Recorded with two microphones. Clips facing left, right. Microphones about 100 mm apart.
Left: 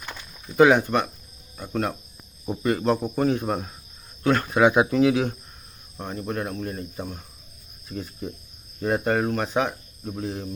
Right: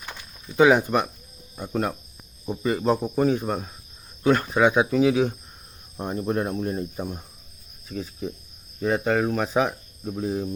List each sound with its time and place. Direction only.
0.5 s speech: centre (ahead or behind)
0.8 s speech: 10° right (ahead or behind)
6.0 s speech: 25° right (ahead or behind)
7.9 s speech: centre (ahead or behind)